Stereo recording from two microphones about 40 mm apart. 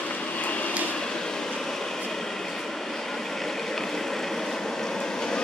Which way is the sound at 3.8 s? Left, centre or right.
Centre.